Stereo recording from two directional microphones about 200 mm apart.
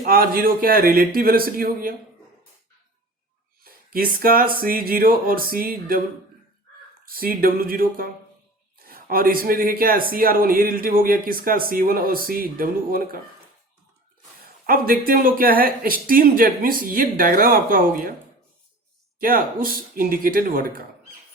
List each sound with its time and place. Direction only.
0.0 s speech: 45° right (ahead or behind)
3.6 s speech: 45° right (ahead or behind)
7.0 s speech: 45° right (ahead or behind)
14.4 s speech: 45° right (ahead or behind)
19.2 s speech: 45° right (ahead or behind)